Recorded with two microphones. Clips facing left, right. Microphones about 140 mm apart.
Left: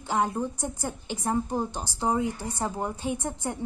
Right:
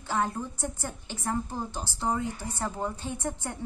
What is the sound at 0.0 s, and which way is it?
A woman's voice, 15° left (ahead or behind).